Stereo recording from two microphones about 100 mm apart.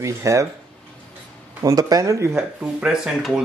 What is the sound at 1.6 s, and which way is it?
Speech, 40° right (ahead or behind).